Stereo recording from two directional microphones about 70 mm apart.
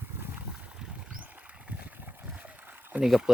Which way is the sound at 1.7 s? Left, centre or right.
Right.